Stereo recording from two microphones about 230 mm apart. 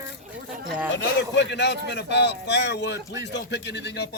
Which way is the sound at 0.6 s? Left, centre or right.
Centre.